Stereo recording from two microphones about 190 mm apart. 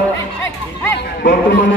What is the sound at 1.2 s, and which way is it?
Speech, 75° left (ahead or behind).